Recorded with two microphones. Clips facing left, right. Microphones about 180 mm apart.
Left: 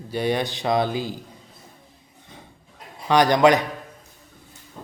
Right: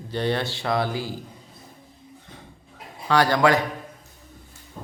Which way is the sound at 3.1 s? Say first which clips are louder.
Left 3 dB; 20° left (ahead or behind).